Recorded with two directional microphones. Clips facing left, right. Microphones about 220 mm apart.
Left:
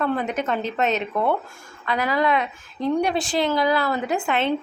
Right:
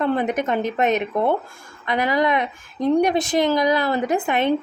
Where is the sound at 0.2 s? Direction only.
15° right (ahead or behind).